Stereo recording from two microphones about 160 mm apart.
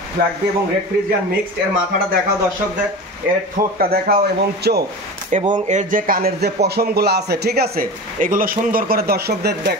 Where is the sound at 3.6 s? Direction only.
60° right (ahead or behind).